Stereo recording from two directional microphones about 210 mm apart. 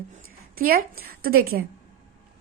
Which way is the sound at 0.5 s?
45° right (ahead or behind).